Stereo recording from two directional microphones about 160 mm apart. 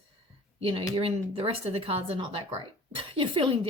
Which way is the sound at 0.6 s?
35° right (ahead or behind).